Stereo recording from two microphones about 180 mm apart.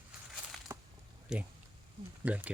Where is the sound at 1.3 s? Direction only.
5° right (ahead or behind).